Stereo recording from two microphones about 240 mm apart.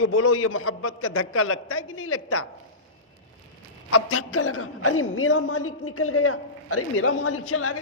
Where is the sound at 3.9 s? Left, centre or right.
Left.